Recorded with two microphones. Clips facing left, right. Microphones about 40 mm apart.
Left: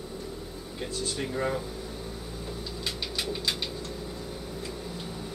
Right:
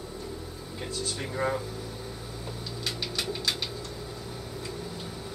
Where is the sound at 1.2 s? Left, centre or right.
Centre.